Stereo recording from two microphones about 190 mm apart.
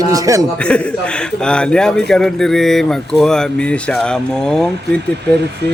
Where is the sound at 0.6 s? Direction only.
5° left (ahead or behind).